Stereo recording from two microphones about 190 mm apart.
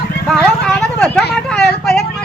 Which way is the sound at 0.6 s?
5° left (ahead or behind).